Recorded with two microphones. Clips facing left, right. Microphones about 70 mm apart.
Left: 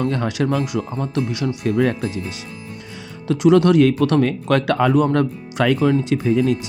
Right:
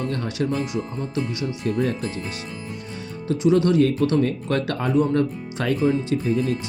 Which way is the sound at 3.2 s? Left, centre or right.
Left.